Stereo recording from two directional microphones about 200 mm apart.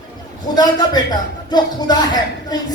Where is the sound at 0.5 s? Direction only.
20° left (ahead or behind).